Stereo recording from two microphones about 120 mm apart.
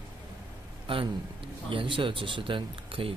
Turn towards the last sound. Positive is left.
turn(degrees=-45)  # may be behind; listen again after turning